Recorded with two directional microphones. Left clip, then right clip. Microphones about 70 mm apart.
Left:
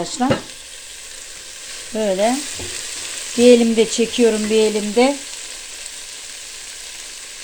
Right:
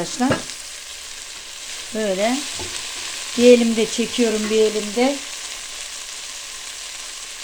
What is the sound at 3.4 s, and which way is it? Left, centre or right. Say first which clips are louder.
Frying: left 2 dB; left.